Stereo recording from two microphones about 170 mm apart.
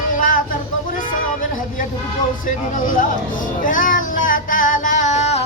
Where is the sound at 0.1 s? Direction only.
50° left (ahead or behind).